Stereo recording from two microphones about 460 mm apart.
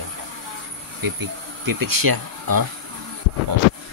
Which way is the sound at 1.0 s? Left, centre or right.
Right.